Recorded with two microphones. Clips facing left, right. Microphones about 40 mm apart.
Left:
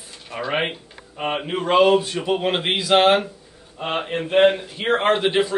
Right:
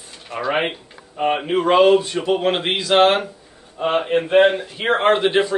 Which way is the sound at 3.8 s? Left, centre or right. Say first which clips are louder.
Right 6 dB; right.